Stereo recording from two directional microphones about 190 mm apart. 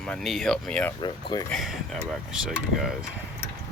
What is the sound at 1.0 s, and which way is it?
Speech, 25° left (ahead or behind).